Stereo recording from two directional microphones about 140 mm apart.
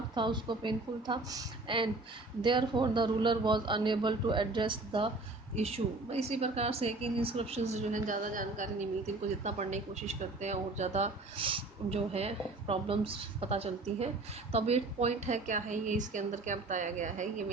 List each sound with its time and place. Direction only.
0.1 s a man's voice: 35° right (ahead or behind)
5.5 s a woman's voice: 50° right (ahead or behind)